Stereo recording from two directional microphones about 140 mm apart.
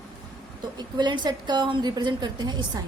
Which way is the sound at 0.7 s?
30° right (ahead or behind).